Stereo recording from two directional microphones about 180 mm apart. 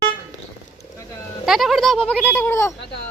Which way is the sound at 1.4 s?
Centre (ahead or behind).